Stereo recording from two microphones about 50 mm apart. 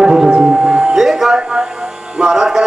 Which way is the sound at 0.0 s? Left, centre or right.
Centre.